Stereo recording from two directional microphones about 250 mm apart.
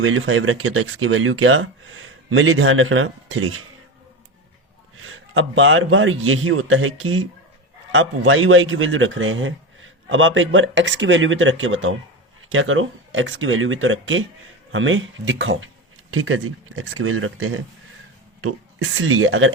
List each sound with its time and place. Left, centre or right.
0.0 s speech: right
4.9 s a man's voice: right